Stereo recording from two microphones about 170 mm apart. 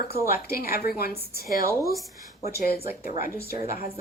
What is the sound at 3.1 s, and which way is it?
Speech, 55° left (ahead or behind).